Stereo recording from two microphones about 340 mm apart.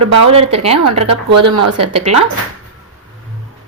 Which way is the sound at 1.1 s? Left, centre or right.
Right.